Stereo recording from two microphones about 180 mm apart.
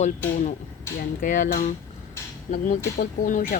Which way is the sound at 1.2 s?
45° left (ahead or behind).